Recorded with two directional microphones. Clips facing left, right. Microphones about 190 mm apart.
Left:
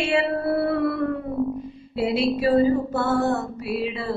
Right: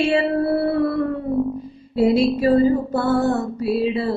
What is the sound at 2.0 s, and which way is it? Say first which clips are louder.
Music: right 5 dB; 40° right (ahead or behind).